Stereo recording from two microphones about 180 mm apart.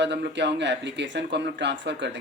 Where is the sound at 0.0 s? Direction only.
75° right (ahead or behind).